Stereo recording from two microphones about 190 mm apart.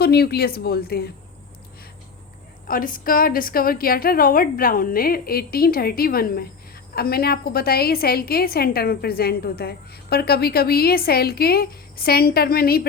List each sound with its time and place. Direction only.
0.0 s speech: 55° left (ahead or behind)
2.6 s a woman's voice: 45° left (ahead or behind)